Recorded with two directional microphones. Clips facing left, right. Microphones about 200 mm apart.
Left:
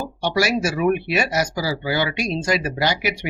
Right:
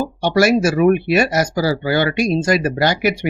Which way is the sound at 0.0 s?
50° right (ahead or behind).